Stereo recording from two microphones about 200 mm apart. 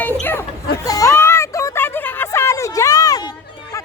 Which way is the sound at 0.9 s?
15° left (ahead or behind).